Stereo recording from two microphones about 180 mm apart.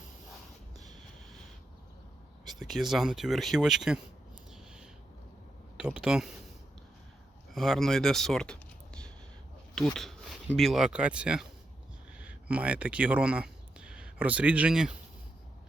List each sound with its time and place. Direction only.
2.4 s speech: centre (ahead or behind)
4.5 s a sound: 5° right (ahead or behind)
5.7 s speech: 5° right (ahead or behind)
7.5 s speech: centre (ahead or behind)